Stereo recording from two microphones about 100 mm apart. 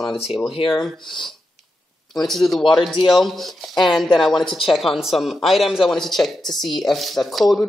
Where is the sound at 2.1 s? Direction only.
5° left (ahead or behind).